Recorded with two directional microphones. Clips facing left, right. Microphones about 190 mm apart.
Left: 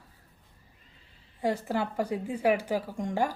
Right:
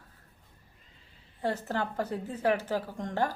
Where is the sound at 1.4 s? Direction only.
10° left (ahead or behind).